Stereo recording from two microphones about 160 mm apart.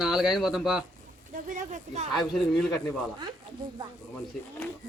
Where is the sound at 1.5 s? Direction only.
50° right (ahead or behind).